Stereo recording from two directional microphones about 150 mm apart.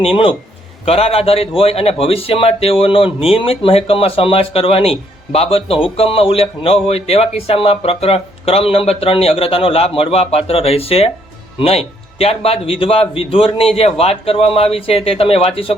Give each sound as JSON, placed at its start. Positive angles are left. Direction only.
{"t": 0.0, "sound": "a man's voice", "side_deg": 35}